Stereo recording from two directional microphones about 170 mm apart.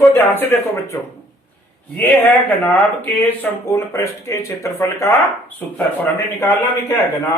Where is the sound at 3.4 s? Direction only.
15° left (ahead or behind).